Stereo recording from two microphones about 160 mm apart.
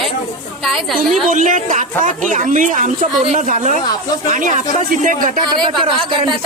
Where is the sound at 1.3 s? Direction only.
55° right (ahead or behind).